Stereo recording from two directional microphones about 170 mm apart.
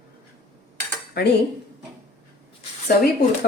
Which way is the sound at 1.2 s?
75° left (ahead or behind).